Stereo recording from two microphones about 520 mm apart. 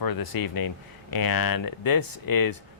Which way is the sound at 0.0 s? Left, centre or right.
Left.